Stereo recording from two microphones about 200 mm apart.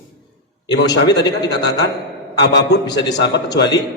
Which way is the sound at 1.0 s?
60° left (ahead or behind).